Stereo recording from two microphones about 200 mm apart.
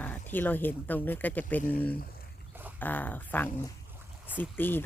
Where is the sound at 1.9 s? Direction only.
50° left (ahead or behind).